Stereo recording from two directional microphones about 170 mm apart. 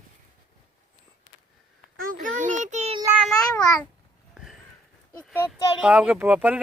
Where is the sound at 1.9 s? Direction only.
55° right (ahead or behind).